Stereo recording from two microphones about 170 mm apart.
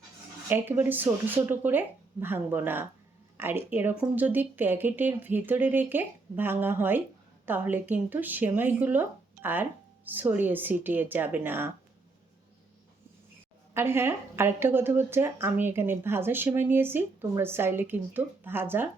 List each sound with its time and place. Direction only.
0.4 s a woman's voice: 15° right (ahead or behind)
13.7 s a woman's voice: 15° right (ahead or behind)